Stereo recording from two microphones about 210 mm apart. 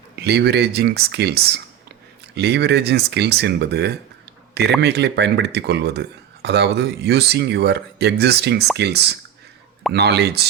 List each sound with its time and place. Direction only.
0.2 s speech: 50° right (ahead or behind)